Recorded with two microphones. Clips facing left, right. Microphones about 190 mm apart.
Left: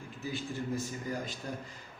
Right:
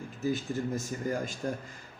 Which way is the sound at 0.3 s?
45° right (ahead or behind).